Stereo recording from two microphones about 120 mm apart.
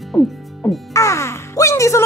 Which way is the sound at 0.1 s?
20° left (ahead or behind).